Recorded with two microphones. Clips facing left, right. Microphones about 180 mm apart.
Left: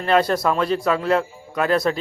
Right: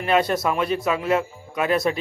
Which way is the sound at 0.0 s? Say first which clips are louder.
Left 2 dB; 15° right (ahead or behind).